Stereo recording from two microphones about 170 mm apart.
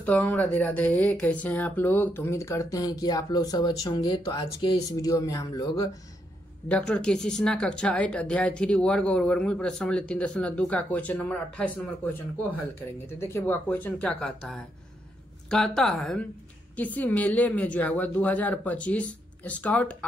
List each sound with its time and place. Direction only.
0.0 s speech: 10° left (ahead or behind); by 5.9 s 25° left (ahead or behind)
6.7 s a woman's voice: 5° left (ahead or behind)